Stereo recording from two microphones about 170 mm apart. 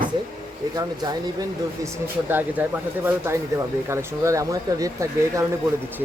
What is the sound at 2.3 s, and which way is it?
Speech, 10° right (ahead or behind).